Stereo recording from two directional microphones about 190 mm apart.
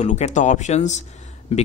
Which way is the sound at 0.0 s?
35° left (ahead or behind).